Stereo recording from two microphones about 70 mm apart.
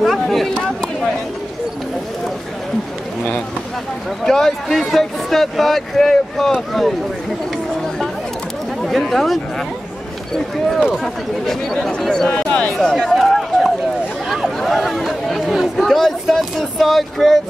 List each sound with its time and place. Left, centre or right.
0.0 s a sound: centre
4.2 s a sound: centre
6.7 s speech: centre
8.8 s speech: centre
11.4 s speech: centre
12.9 s run: centre
14.6 s speech: centre